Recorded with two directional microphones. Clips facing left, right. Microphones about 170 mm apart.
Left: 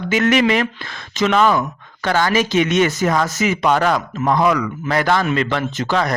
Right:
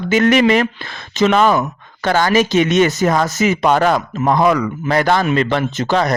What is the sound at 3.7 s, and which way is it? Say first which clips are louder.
Speech: right 1 dB; 45° right (ahead or behind).